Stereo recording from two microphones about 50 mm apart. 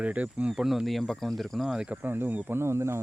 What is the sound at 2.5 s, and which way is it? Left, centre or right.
Speech, right.